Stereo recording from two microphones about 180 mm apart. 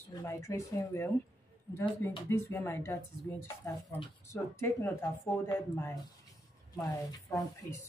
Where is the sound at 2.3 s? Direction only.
15° left (ahead or behind).